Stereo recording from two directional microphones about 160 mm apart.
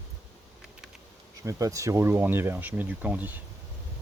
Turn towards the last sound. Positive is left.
turn(degrees=-10)  # may be behind; listen again after turning